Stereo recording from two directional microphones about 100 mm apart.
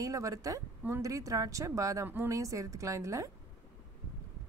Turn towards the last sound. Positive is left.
turn(degrees=-35)  # may be behind; listen again after turning